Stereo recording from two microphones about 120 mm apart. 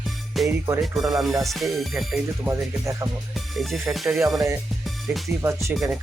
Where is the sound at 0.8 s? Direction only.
Centre (ahead or behind).